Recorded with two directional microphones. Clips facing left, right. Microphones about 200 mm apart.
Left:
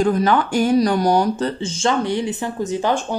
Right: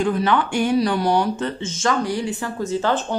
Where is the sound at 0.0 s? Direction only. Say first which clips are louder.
Left 3 dB; 40° left (ahead or behind).